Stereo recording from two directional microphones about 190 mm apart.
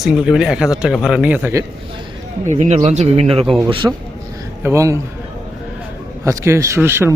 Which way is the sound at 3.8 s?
10° right (ahead or behind).